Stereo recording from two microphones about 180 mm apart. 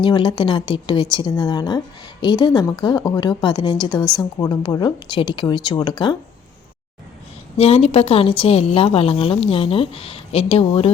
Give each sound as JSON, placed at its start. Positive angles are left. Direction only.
{"t": 0.0, "sound": "speech", "side_deg": 25}
{"t": 7.5, "sound": "a woman's voice", "side_deg": 35}